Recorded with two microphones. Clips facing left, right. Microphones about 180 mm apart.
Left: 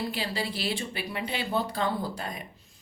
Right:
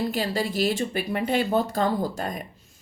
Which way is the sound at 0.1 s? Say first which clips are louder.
Right 6 dB; 45° right (ahead or behind).